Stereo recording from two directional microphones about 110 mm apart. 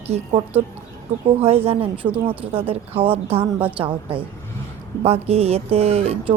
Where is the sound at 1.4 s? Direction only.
65° right (ahead or behind).